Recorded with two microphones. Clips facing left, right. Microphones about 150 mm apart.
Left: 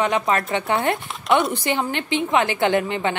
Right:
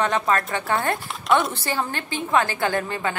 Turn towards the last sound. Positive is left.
turn(degrees=20)  # may be behind; listen again after turning